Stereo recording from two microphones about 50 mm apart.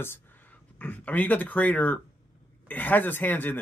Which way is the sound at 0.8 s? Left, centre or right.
Left.